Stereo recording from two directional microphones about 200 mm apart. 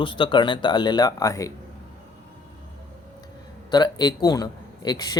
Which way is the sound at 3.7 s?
20° left (ahead or behind).